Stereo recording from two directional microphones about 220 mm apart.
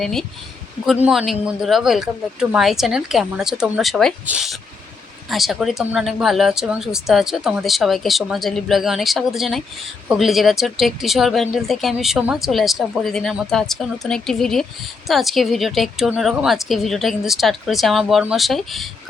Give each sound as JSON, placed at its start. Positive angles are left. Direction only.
{"t": 0.0, "sound": "speech", "side_deg": 0}